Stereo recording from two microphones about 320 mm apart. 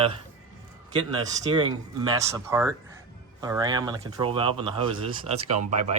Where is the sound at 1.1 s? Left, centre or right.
Centre.